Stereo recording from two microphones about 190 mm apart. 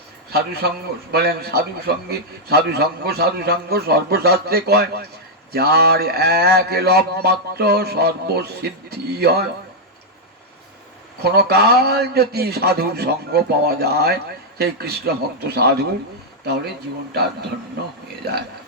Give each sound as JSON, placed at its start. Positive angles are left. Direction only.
{"t": 0.3, "sound": "a man's voice", "side_deg": -60}
{"t": 11.2, "sound": "a man's voice", "side_deg": -55}